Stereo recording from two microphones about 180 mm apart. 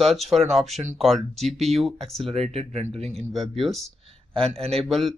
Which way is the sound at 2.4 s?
35° right (ahead or behind).